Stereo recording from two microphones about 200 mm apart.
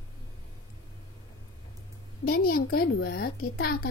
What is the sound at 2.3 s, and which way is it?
Speech, 50° left (ahead or behind).